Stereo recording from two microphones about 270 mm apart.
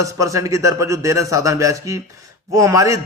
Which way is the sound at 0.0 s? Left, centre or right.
Centre.